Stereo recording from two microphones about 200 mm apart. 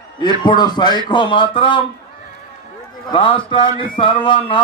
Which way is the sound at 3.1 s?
25° left (ahead or behind).